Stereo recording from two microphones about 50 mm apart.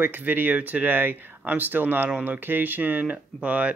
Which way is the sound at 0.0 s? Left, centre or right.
Right.